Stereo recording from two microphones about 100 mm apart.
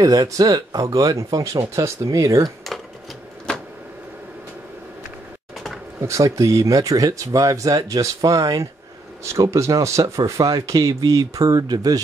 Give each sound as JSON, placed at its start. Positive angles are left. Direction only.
{"t": 0.0, "sound": "speech", "side_deg": -35}
{"t": 3.5, "sound": "a sound", "side_deg": 10}
{"t": 5.9, "sound": "speech", "side_deg": -30}